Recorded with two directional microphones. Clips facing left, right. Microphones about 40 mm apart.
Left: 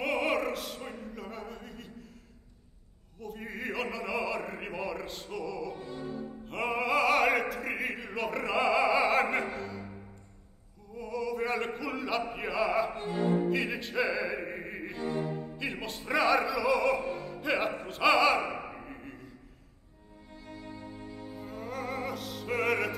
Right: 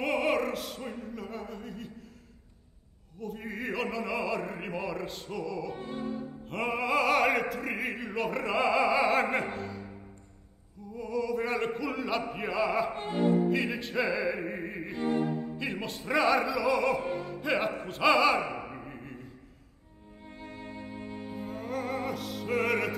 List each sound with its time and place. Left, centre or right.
0.0 s opera: centre
3.2 s opera: centre
5.8 s music: right
6.5 s opera: centre
11.0 s opera: centre
12.9 s music: right
13.5 s opera: centre
15.0 s violin: right
15.5 s opera: centre
20.3 s music: right
21.5 s music: centre